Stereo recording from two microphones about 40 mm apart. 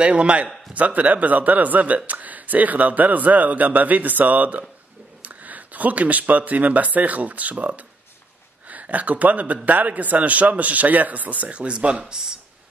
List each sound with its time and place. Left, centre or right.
0.0 s a man's voice: right